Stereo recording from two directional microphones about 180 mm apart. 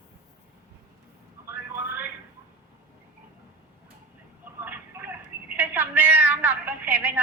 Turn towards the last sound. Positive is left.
turn(degrees=-10)  # may be behind; listen again after turning